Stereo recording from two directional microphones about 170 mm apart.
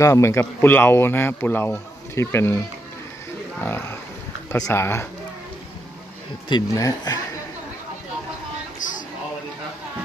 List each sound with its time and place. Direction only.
0.0 s a man's voice: 15° left (ahead or behind)
3.6 s a man's voice: 15° left (ahead or behind)
6.5 s speech: 20° left (ahead or behind)
8.7 s a sound: 50° left (ahead or behind)